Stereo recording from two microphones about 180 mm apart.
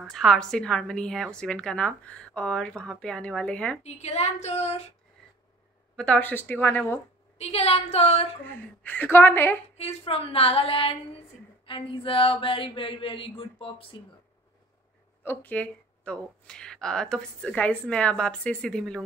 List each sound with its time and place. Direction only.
0.0 s a woman's voice: centre (ahead or behind)
3.8 s a woman's voice: 35° left (ahead or behind)
5.9 s a woman's voice: 5° left (ahead or behind)
7.3 s a woman's voice: 35° left (ahead or behind)
8.5 s a woman's voice: 10° left (ahead or behind)
9.8 s a woman's voice: 35° left (ahead or behind)
15.2 s a woman's voice: 10° left (ahead or behind)